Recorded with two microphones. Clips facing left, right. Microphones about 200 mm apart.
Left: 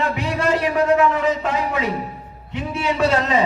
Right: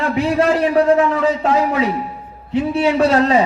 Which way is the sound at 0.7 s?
35° right (ahead or behind).